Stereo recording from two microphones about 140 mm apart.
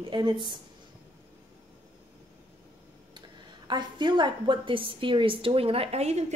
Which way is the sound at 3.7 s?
35° right (ahead or behind).